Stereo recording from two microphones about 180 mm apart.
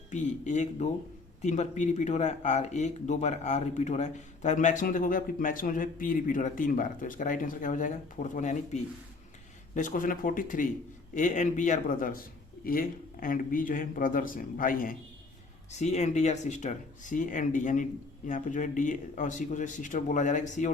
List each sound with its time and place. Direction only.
0.1 s speech: 40° left (ahead or behind)
15.8 s speech: 40° left (ahead or behind)